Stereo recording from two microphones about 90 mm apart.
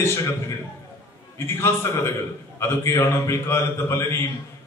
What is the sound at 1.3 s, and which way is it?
A man's voice, 30° left (ahead or behind).